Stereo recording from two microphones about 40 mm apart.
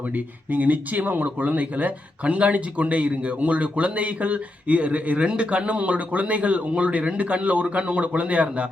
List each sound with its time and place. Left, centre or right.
0.5 s speech: right